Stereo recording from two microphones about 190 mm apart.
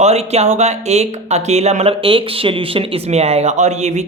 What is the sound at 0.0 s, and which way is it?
Speech, 35° right (ahead or behind).